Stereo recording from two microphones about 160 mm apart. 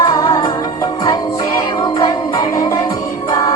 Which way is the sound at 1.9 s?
30° left (ahead or behind).